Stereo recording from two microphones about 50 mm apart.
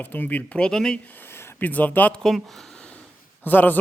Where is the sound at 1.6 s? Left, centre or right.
Left.